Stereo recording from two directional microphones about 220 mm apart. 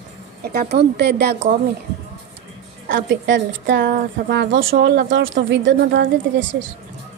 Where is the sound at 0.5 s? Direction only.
45° right (ahead or behind).